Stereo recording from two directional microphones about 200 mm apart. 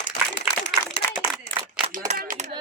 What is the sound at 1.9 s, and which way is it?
Single-lens reflex camera, 40° right (ahead or behind).